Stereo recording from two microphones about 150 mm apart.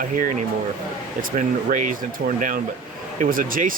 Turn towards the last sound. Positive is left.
turn(degrees=-65)  # may be behind; listen again after turning